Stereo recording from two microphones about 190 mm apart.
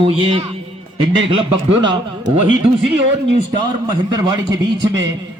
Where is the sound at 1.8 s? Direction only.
70° right (ahead or behind).